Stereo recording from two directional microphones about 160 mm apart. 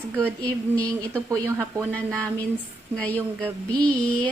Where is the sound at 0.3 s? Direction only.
10° left (ahead or behind).